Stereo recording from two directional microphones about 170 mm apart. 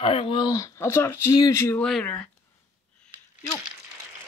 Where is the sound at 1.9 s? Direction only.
5° left (ahead or behind).